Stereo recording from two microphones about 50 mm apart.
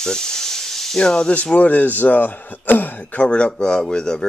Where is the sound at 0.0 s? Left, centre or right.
Centre.